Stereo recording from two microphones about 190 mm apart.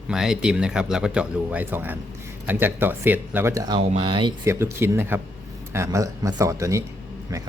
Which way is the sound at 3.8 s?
30° right (ahead or behind).